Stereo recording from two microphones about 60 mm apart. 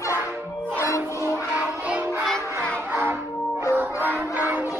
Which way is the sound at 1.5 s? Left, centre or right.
Right.